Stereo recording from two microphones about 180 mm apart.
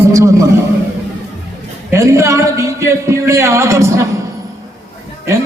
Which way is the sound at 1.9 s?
15° right (ahead or behind).